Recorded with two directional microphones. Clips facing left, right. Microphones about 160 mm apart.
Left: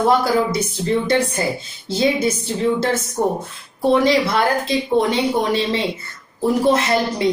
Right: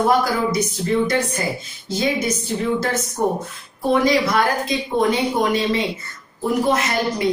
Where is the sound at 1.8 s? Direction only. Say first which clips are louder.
Left 3 dB; 30° left (ahead or behind).